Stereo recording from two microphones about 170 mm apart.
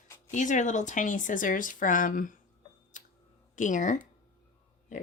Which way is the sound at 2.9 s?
50° left (ahead or behind).